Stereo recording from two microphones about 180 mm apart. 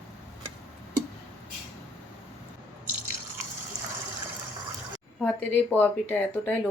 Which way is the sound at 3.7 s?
20° right (ahead or behind).